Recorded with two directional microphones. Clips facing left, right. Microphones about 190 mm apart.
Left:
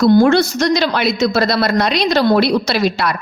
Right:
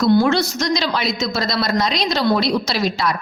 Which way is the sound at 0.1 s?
50° left (ahead or behind).